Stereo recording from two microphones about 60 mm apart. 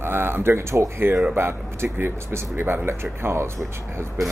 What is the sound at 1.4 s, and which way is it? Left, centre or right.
Speech, right.